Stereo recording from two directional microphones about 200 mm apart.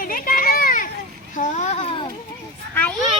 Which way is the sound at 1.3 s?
35° left (ahead or behind).